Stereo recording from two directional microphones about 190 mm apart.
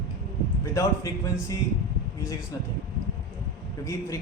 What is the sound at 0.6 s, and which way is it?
Speech, 15° left (ahead or behind).